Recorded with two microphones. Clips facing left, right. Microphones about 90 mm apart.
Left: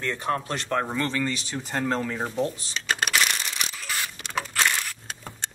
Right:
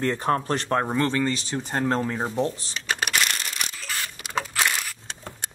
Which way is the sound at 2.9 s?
5° right (ahead or behind).